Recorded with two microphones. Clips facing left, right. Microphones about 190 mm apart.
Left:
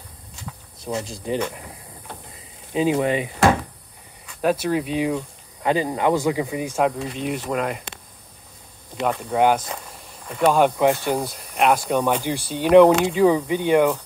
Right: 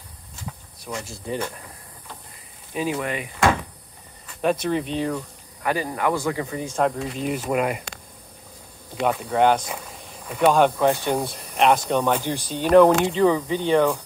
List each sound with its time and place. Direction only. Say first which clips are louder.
0.8 s speech: left 4 dB; 25° left (ahead or behind)
2.7 s speech: left 6 dB; 25° left (ahead or behind)
4.4 s speech: left 1 dB; 5° left (ahead or behind)
5.6 s speech: left 3 dB; 20° left (ahead or behind)
7.2 s speech: right 1 dB; centre (ahead or behind)
9.0 s speech: even; centre (ahead or behind)
10.5 s speech: left 2 dB; 10° left (ahead or behind)